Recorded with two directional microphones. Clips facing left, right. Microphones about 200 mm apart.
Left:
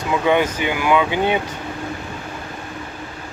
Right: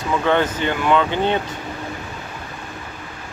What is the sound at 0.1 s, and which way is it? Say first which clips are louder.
Speech: left 1 dB; 10° left (ahead or behind).